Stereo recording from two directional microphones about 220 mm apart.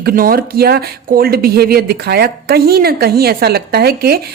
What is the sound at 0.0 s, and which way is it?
Speech, 40° right (ahead or behind).